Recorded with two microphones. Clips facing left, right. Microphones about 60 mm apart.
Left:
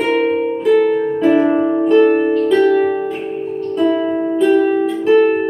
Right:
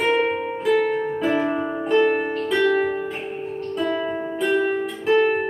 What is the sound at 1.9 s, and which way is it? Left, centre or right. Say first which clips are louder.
Music: left 6 dB; centre.